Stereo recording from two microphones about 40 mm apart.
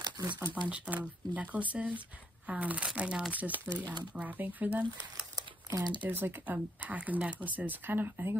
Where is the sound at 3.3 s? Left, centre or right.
Right.